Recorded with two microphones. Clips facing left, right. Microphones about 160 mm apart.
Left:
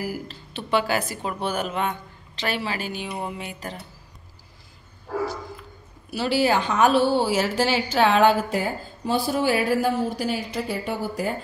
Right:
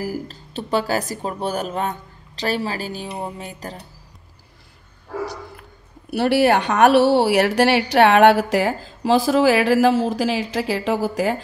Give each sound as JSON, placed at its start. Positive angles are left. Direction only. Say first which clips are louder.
{"t": 0.0, "sound": "speech", "louder": "right 3 dB", "side_deg": -40}
{"t": 5.2, "sound": "a woman's voice", "louder": "left 1 dB", "side_deg": -65}